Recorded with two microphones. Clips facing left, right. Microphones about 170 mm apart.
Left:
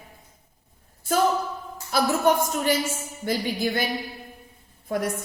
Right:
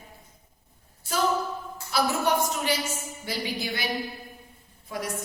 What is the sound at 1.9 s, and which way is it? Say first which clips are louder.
A woman's voice: left 4 dB; 50° left (ahead or behind).